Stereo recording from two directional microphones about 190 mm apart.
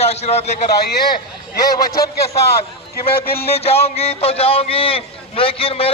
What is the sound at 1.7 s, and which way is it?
Speech, 20° left (ahead or behind).